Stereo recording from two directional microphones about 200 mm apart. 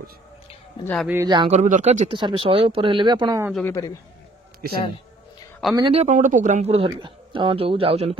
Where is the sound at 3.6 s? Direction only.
15° left (ahead or behind).